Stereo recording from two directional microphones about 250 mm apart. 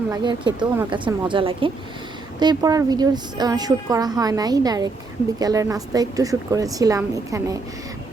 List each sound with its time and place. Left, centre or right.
0.1 s a woman's voice: centre